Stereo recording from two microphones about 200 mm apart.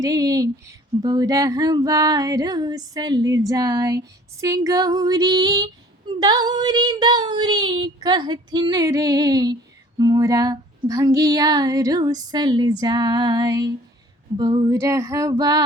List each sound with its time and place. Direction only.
0.0 s female singing: 15° right (ahead or behind)